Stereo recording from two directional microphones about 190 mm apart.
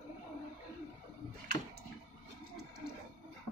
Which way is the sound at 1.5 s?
20° left (ahead or behind).